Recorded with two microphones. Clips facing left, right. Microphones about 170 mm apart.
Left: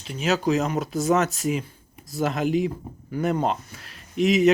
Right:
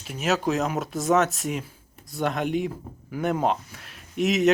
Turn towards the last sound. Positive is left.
turn(degrees=0)  # may be behind; listen again after turning